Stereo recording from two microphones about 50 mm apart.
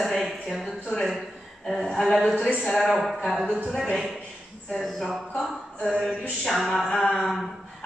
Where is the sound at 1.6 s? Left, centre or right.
Centre.